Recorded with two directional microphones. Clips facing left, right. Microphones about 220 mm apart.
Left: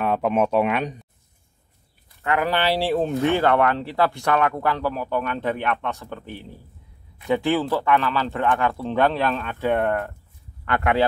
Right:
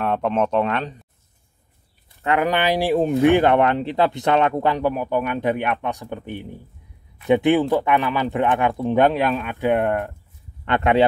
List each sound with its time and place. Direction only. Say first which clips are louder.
0.0 s a sound: even; 5° left (ahead or behind)
0.3 s speech: left 1 dB; 10° left (ahead or behind)
2.2 s speech: right 2 dB; 15° right (ahead or behind)